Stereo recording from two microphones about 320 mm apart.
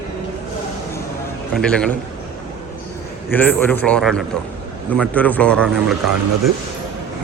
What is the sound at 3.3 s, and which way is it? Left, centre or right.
A man's voice, centre.